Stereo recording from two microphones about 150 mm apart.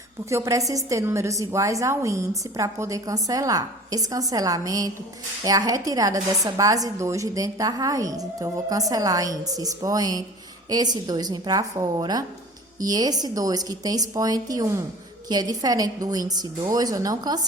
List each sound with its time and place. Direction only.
0.3 s a woman's voice: 20° right (ahead or behind)